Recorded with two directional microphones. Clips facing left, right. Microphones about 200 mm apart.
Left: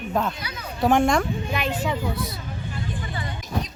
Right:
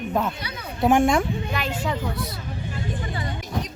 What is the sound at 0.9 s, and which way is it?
Speech, 5° right (ahead or behind).